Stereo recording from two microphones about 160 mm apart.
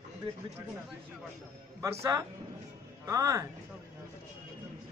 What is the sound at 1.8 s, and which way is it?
A man's voice, 20° right (ahead or behind).